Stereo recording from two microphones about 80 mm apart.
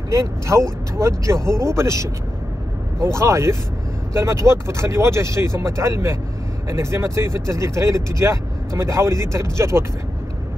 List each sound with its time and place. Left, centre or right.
0.1 s speech: right